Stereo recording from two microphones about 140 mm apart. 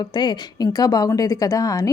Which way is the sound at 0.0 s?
30° left (ahead or behind).